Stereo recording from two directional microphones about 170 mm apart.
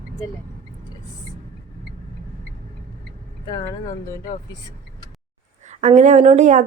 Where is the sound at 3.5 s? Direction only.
25° left (ahead or behind).